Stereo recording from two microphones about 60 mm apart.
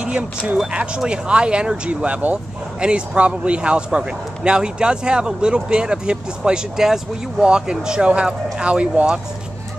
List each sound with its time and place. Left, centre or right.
0.6 s a man's voice: centre